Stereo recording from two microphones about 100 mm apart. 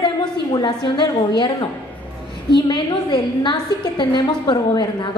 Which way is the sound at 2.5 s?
50° left (ahead or behind).